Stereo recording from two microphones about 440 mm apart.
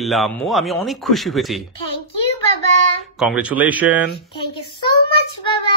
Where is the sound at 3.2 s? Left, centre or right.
Centre.